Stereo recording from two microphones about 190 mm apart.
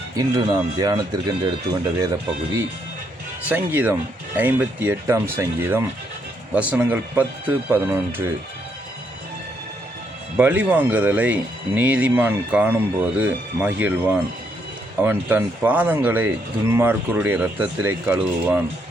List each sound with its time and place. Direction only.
0.2 s speech: 20° right (ahead or behind)
3.5 s speech: 10° right (ahead or behind)
10.3 s speech: 10° right (ahead or behind)